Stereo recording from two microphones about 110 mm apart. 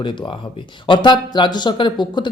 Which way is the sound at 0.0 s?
50° left (ahead or behind).